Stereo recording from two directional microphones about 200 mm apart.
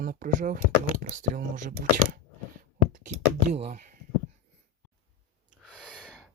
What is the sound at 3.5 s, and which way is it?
Speech, 35° right (ahead or behind).